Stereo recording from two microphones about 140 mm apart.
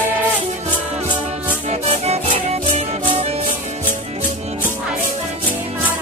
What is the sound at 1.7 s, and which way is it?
Music, 50° right (ahead or behind).